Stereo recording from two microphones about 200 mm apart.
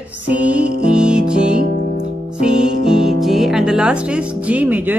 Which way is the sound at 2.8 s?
5° right (ahead or behind).